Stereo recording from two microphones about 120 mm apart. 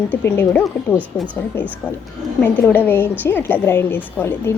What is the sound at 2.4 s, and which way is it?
A woman's voice, 15° left (ahead or behind).